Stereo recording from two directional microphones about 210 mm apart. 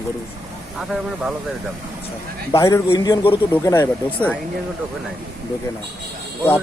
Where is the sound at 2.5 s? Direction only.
15° left (ahead or behind).